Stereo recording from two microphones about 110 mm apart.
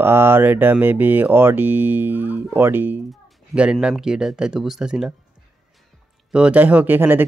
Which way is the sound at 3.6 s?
10° right (ahead or behind).